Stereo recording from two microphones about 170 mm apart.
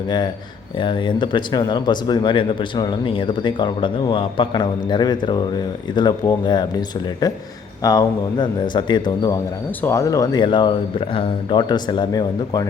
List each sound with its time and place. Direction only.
0.8 s speech: 30° left (ahead or behind)
7.8 s speech: 20° left (ahead or behind)